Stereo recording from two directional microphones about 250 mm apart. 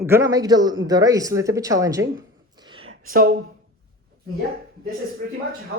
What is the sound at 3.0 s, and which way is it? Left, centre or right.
Speech, right.